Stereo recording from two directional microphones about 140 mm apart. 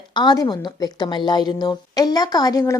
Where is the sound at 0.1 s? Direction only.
35° left (ahead or behind).